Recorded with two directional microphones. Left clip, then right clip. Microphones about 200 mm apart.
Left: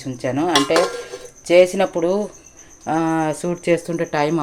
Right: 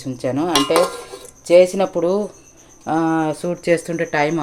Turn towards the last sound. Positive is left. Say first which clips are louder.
# right 1 dB
turn(degrees=5)  # may be behind; listen again after turning